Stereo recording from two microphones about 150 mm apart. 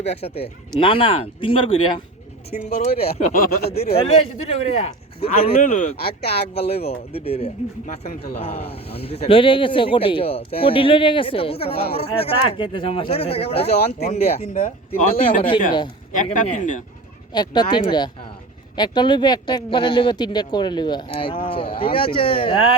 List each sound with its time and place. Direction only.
0.0 s a man's voice: 45° left (ahead or behind)
2.6 s a man's voice: 50° left (ahead or behind)
5.5 s speech: 55° left (ahead or behind)
6.5 s a man's voice: 45° left (ahead or behind)
15.1 s speech: 70° left (ahead or behind)
16.1 s speech: 60° left (ahead or behind)
17.3 s a man's voice: 30° left (ahead or behind)